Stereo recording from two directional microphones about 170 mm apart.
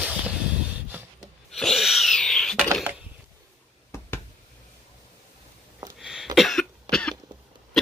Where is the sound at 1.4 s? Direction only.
Centre (ahead or behind).